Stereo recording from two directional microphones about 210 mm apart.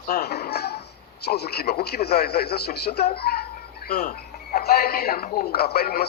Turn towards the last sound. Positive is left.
turn(degrees=50)  # may be behind; listen again after turning